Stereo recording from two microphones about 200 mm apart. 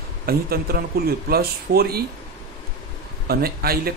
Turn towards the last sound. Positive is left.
turn(degrees=-50)  # may be behind; listen again after turning